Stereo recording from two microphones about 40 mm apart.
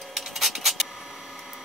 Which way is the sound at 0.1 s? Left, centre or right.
Centre.